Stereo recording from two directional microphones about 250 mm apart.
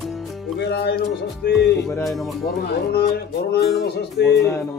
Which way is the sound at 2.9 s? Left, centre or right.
Left.